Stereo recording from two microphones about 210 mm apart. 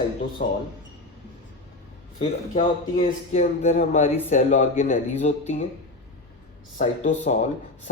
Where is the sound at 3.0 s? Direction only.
35° left (ahead or behind).